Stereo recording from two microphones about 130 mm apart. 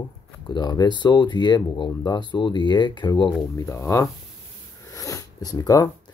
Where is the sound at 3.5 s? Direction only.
25° left (ahead or behind).